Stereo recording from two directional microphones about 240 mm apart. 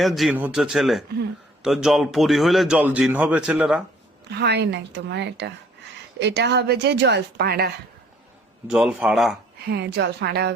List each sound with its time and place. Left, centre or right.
0.0 s speech: centre
4.3 s speech: right
8.7 s speech: centre
9.6 s speech: right